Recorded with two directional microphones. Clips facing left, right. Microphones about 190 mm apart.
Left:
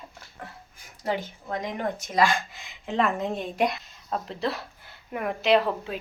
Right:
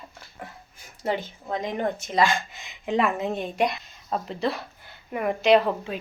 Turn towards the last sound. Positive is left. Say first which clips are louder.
# right 3 dB
turn(degrees=0)  # may be behind; listen again after turning